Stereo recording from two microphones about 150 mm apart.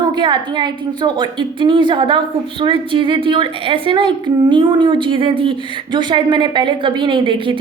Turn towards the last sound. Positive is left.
turn(degrees=-35)  # may be behind; listen again after turning